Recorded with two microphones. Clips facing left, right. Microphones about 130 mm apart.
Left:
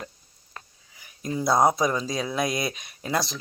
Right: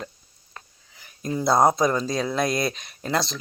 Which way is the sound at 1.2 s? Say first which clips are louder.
Right 2 dB; 30° right (ahead or behind).